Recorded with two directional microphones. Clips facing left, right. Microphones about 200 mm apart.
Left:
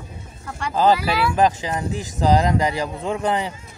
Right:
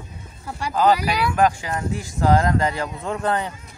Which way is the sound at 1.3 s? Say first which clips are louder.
Even; 20° left (ahead or behind).